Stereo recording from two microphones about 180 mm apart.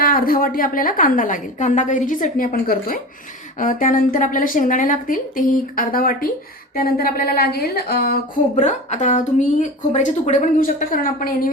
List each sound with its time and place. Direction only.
0.0 s a woman's voice: 55° left (ahead or behind)
6.7 s a sound: 55° left (ahead or behind)
8.5 s a woman's voice: 40° left (ahead or behind)